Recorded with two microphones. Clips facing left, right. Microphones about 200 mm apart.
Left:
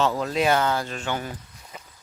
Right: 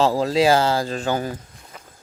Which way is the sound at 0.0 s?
30° right (ahead or behind).